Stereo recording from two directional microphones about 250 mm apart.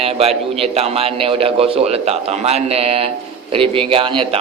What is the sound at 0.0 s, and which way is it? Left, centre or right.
A man's voice, right.